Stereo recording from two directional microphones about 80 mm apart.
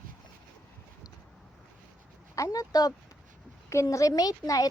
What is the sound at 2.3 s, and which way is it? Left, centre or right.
Speech, left.